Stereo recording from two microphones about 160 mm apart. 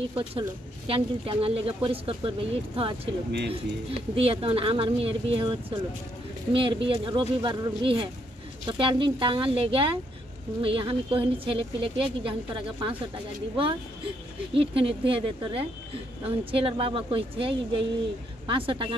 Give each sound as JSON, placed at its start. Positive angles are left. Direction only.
{"t": 0.1, "sound": "speech", "side_deg": -35}
{"t": 3.3, "sound": "speech", "side_deg": -90}
{"t": 4.1, "sound": "speech", "side_deg": -35}
{"t": 14.5, "sound": "speech", "side_deg": -35}